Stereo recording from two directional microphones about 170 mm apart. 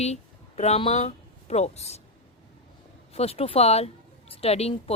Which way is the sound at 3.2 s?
35° left (ahead or behind).